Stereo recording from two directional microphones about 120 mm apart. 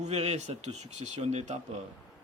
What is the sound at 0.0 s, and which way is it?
A man's voice, 65° right (ahead or behind).